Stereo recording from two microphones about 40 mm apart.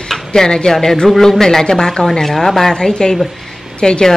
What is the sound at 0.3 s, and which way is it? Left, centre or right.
Speech, centre.